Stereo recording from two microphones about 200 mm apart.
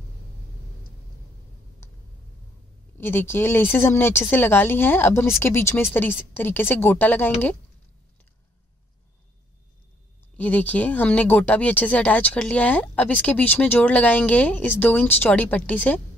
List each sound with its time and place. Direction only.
3.0 s speech: 10° left (ahead or behind)
10.3 s speech: 10° left (ahead or behind)